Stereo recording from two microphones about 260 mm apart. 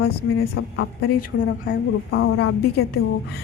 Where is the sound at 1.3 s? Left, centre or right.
Left.